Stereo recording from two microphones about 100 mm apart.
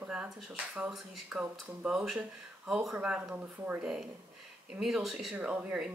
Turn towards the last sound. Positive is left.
turn(degrees=-15)  # may be behind; listen again after turning